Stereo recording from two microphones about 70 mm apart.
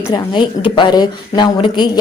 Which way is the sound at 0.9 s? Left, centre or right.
Left.